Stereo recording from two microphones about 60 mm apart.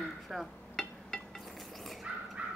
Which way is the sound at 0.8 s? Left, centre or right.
Centre.